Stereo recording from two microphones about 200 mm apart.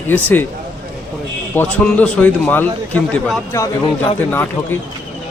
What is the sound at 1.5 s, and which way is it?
Speech, 5° left (ahead or behind).